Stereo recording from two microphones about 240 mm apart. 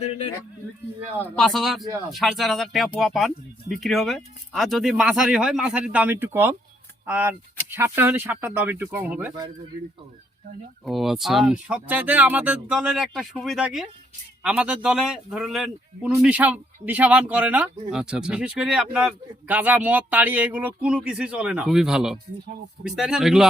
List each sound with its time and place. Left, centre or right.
0.0 s speech: left
1.4 s a man's voice: centre
10.8 s a man's voice: centre